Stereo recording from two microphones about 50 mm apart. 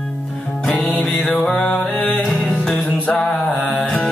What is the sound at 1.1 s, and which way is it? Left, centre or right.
Music, centre.